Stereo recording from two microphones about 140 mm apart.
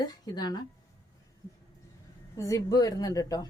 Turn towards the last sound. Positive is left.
turn(degrees=25)  # may be behind; listen again after turning